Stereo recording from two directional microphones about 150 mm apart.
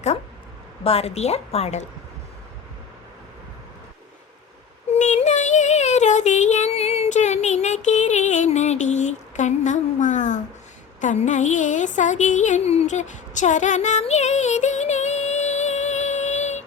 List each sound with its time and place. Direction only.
0.9 s a woman's voice: 45° left (ahead or behind)
4.9 s child singing: 50° left (ahead or behind)
11.0 s a sound: 50° left (ahead or behind)